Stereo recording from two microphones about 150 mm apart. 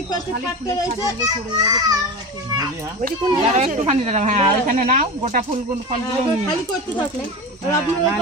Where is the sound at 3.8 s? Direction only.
45° right (ahead or behind).